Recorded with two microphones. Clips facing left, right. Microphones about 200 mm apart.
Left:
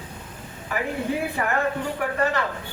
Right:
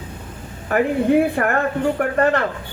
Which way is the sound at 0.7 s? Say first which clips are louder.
Right 10 dB; 55° right (ahead or behind).